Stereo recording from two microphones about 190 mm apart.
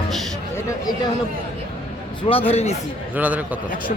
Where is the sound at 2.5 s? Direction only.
35° left (ahead or behind).